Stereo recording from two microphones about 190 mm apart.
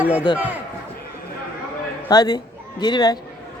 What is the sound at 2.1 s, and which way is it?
A man's voice, 20° left (ahead or behind).